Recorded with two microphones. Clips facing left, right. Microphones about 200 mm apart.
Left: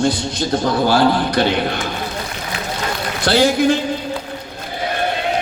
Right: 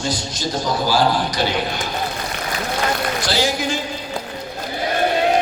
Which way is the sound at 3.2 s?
60° left (ahead or behind).